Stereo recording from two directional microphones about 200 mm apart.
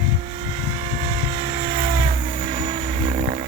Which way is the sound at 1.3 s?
30° right (ahead or behind).